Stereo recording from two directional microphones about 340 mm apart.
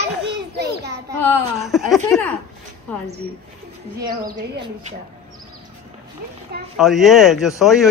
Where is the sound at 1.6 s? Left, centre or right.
Centre.